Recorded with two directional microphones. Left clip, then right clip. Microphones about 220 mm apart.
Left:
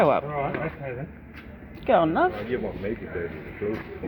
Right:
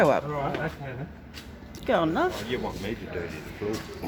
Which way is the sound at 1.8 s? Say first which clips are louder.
Left 4 dB; 15° right (ahead or behind).